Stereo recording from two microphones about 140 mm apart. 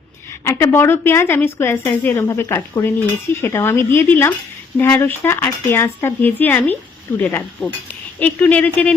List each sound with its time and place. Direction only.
0.4 s speech: 20° left (ahead or behind)